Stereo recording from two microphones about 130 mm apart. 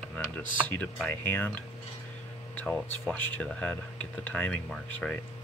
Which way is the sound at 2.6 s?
5° left (ahead or behind).